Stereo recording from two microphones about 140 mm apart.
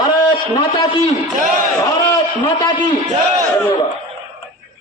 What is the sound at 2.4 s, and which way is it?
Speech, 35° left (ahead or behind).